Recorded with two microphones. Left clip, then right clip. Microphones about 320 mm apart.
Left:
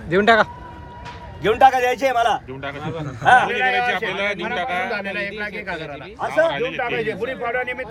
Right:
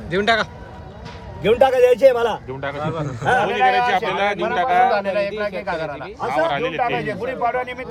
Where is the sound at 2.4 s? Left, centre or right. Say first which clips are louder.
Right 4 dB; right.